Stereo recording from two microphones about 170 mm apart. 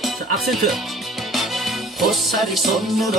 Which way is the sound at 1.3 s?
Centre (ahead or behind).